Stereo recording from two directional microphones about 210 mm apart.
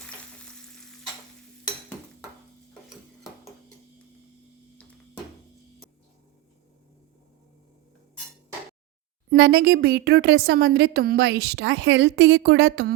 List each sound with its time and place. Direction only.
0.3 s frying: 5° left (ahead or behind)
9.3 s speech: 50° right (ahead or behind)